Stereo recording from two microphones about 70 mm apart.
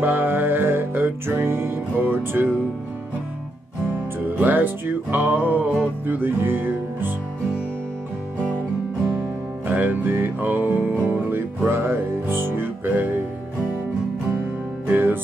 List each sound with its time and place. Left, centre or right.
0.0 s music: right
4.4 s music: right
9.7 s music: right
14.9 s music: right